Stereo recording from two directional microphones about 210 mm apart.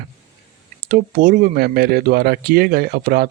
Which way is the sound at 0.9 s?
40° right (ahead or behind).